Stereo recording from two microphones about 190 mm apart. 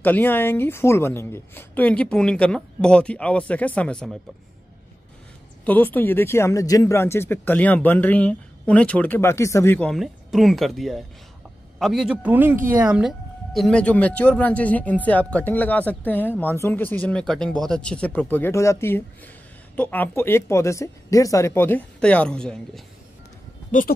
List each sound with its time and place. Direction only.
0.0 s speech: 10° left (ahead or behind)
5.7 s a man's voice: 10° left (ahead or behind)